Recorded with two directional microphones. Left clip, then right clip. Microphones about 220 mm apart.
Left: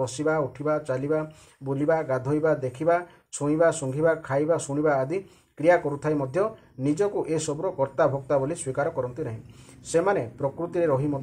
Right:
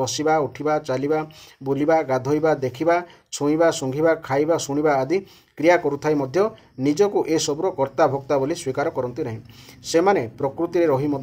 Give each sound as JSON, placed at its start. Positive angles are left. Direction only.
{"t": 0.0, "sound": "speech", "side_deg": -40}